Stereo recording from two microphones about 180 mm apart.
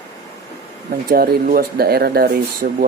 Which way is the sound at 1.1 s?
55° right (ahead or behind).